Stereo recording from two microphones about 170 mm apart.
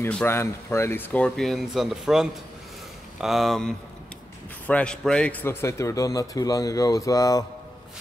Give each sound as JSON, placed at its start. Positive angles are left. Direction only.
{"t": 0.1, "sound": "a man's voice", "side_deg": 10}